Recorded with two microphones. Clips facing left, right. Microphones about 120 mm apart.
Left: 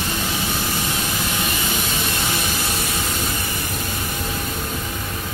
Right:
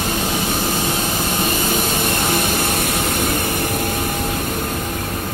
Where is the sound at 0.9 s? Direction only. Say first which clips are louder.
Right 4 dB; 35° right (ahead or behind); by 4.4 s 50° right (ahead or behind).